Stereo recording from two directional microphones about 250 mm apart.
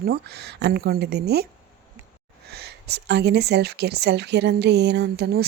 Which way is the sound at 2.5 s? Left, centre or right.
Right.